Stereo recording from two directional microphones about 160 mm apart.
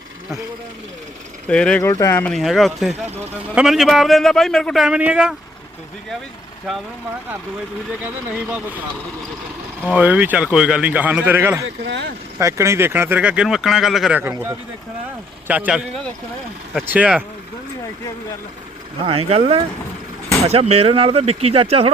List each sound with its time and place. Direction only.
1.5 s speech: 5° left (ahead or behind)
1.8 s speech: 20° left (ahead or behind)
2.3 s a man's voice: centre (ahead or behind)
6.7 s a man's voice: centre (ahead or behind)
8.0 s speech: 10° right (ahead or behind)
9.9 s speech: 10° right (ahead or behind)
11.9 s speech: 90° right
12.4 s speech: 20° right (ahead or behind)
16.9 s speech: 10° right (ahead or behind)
19.0 s speech: 40° right (ahead or behind)